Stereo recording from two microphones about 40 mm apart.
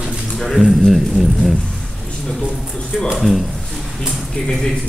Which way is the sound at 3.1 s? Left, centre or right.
Centre.